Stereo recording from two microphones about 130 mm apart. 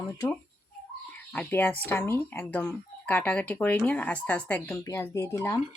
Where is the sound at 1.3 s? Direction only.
10° left (ahead or behind).